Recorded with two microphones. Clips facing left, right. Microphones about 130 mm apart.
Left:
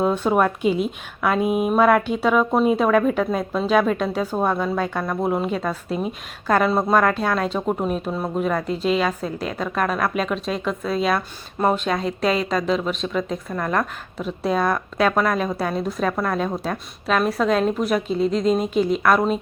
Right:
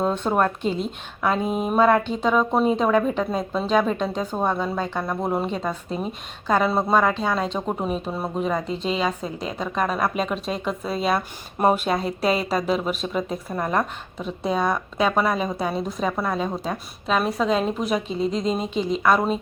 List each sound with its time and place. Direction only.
0.0 s speech: 5° left (ahead or behind)
5.9 s a woman's voice: 35° right (ahead or behind)
6.6 s speech: 5° right (ahead or behind)
13.5 s speech: 15° right (ahead or behind)
13.7 s speech: centre (ahead or behind)